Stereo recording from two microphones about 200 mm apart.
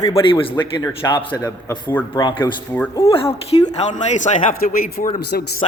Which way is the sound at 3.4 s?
30° left (ahead or behind).